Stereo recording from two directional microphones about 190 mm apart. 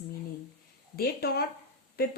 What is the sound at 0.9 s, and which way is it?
Speech, 55° left (ahead or behind).